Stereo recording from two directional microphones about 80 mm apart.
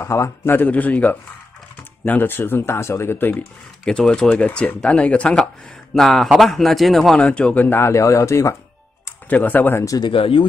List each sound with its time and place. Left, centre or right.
0.0 s a man's voice: left
0.6 s speech: left
3.8 s speech: centre
5.9 s a man's voice: centre
7.2 s speech: centre
7.6 s speech: left
9.3 s speech: left